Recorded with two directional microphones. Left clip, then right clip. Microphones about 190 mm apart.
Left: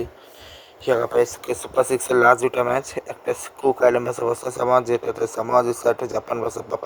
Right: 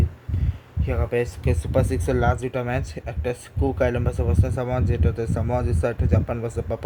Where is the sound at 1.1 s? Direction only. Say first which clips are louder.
Left 4 dB; 25° left (ahead or behind).